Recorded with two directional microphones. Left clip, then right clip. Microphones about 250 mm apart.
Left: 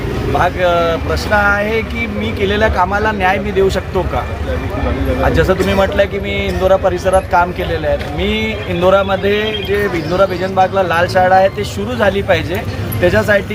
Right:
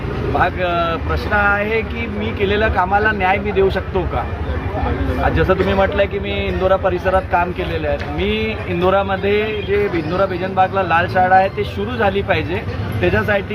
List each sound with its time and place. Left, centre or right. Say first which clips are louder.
0.3 s a man's voice: left 4 dB; left
5.3 s a man's voice: left 2 dB; left